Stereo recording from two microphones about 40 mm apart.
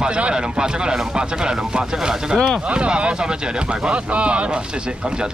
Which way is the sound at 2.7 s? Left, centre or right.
Right.